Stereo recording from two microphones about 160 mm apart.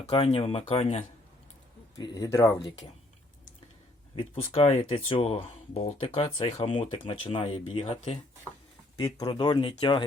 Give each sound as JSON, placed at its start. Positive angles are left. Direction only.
{"t": 0.0, "sound": "speech", "side_deg": 35}
{"t": 2.0, "sound": "speech", "side_deg": 20}
{"t": 4.5, "sound": "speech", "side_deg": 40}
{"t": 9.0, "sound": "speech", "side_deg": 25}